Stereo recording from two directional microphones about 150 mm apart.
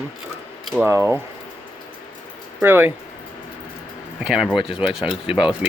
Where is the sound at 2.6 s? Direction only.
15° right (ahead or behind).